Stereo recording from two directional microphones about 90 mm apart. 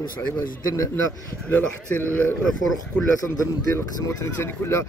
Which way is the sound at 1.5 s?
20° left (ahead or behind).